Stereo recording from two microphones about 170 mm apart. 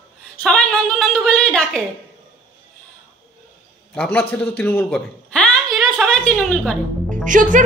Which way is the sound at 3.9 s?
10° left (ahead or behind).